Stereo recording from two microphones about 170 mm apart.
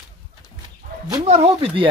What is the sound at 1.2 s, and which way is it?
Speech, 40° right (ahead or behind).